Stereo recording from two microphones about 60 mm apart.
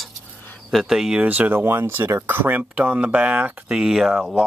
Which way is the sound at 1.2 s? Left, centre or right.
Right.